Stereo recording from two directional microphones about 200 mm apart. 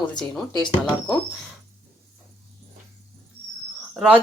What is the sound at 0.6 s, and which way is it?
Speech, 20° left (ahead or behind).